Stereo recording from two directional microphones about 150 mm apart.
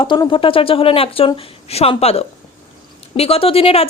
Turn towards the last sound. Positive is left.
turn(degrees=40)  # may be behind; listen again after turning